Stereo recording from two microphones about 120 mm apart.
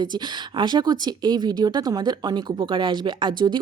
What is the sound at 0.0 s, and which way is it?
A woman's voice, 40° right (ahead or behind).